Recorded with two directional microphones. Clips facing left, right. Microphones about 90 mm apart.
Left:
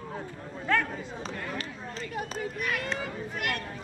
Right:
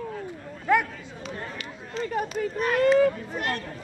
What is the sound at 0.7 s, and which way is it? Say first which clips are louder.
Chatter: right 5 dB; 15° right (ahead or behind).